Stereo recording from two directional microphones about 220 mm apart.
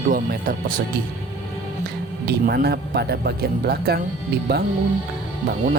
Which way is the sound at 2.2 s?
45° right (ahead or behind).